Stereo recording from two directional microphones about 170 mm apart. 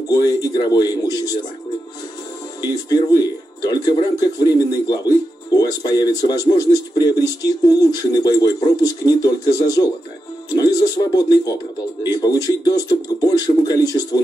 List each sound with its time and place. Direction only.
0.1 s speech: 20° left (ahead or behind)
2.6 s speech: 20° left (ahead or behind)